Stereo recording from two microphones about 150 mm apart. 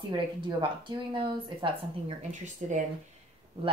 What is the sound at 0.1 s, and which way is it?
A woman's voice, 30° right (ahead or behind).